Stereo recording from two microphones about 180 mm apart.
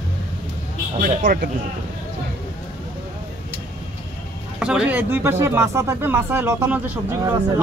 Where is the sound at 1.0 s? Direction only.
45° right (ahead or behind).